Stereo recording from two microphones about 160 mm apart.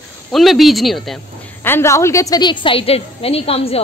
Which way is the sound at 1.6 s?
15° left (ahead or behind).